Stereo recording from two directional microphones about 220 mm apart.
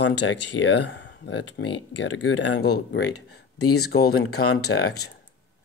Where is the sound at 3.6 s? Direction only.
90° left.